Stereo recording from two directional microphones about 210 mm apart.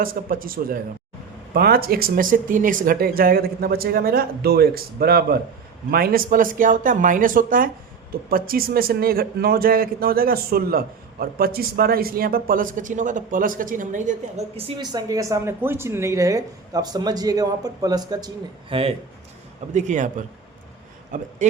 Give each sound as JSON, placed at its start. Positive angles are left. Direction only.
{"t": 0.0, "sound": "a man's voice", "side_deg": -45}